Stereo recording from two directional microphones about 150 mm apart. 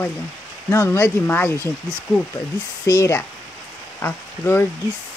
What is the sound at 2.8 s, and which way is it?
Speech, 20° left (ahead or behind).